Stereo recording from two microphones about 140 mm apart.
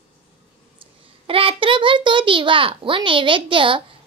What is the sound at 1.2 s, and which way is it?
A child's voice, 40° right (ahead or behind).